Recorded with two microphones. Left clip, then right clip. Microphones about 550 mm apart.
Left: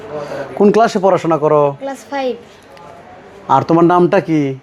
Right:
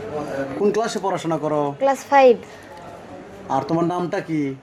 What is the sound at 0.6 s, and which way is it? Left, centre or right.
Speech, left.